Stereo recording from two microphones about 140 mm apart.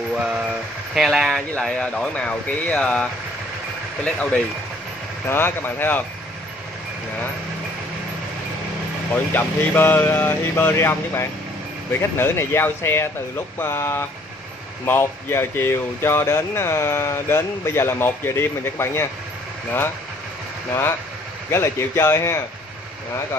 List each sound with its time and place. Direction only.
0.1 s a sound: 5° right (ahead or behind)
0.9 s speech: centre (ahead or behind); by 6.0 s 15° left (ahead or behind)
9.1 s speech: 15° left (ahead or behind)
21.5 s speech: 20° left (ahead or behind)